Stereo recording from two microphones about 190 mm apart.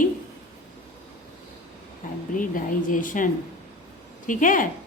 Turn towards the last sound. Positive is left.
turn(degrees=45)  # may be behind; listen again after turning